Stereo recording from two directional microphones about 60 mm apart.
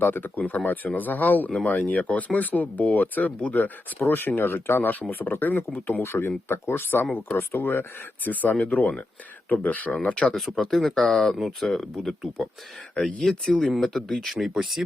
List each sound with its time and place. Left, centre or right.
0.0 s speech: left
10.3 s speech: centre
12.9 s speech: centre
13.4 s speech: centre
14.3 s speech: centre